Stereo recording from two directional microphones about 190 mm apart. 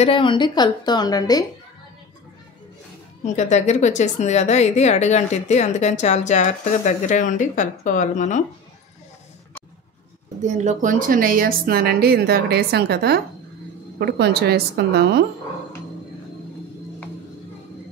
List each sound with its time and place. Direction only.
0.0 s a woman's voice: 25° left (ahead or behind)
3.3 s a woman's voice: 40° left (ahead or behind)
10.4 s a woman's voice: 40° right (ahead or behind); by 15.2 s 60° right (ahead or behind)